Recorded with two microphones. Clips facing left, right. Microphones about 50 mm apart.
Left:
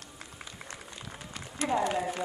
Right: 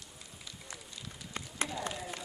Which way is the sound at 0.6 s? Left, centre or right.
Left.